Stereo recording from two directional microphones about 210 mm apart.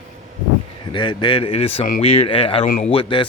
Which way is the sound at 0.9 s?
20° left (ahead or behind).